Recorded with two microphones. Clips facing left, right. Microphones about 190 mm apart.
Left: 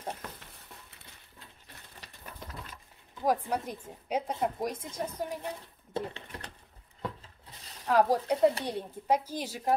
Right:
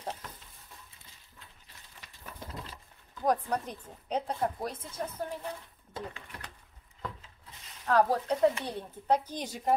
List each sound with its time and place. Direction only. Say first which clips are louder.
0.1 s stir: left 1 dB; 65° left (ahead or behind)
3.3 s a woman's voice: even; 5° left (ahead or behind)
5.9 s typing: left 5 dB; 30° left (ahead or behind)
7.0 s rub: left 3 dB; 35° left (ahead or behind)
7.8 s a woman's voice: left 1 dB; 10° left (ahead or behind)